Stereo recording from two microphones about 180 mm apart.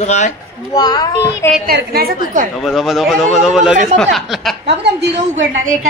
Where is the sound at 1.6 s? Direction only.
60° right (ahead or behind).